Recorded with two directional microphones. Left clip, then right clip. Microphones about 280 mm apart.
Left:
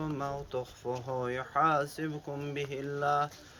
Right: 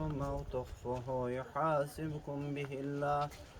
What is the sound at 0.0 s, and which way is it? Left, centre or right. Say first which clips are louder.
Speech: left 4 dB; centre.